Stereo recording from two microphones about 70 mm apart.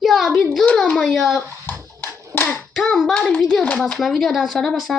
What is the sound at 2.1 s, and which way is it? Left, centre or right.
Hands, right.